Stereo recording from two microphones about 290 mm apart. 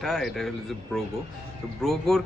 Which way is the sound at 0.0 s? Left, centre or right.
Centre.